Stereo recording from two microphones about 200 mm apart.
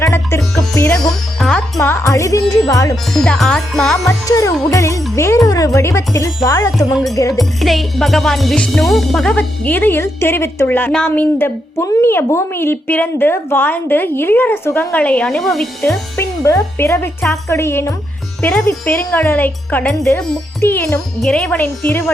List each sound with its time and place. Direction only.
0.0 s music: 15° left (ahead or behind)
0.9 s music: 5° left (ahead or behind)
2.9 s music: centre (ahead or behind)
4.0 s music: 15° left (ahead or behind)
6.9 s music: centre (ahead or behind)
15.9 s music: 15° left (ahead or behind)